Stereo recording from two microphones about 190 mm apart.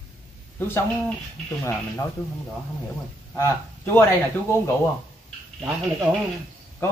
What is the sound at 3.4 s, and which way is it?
Speech, 15° left (ahead or behind).